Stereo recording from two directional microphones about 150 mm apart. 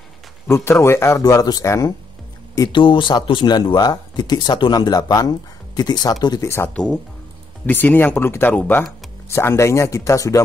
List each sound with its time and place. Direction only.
0.5 s speech: 15° left (ahead or behind)
6.7 s speech: 5° left (ahead or behind); by 10.4 s 20° left (ahead or behind)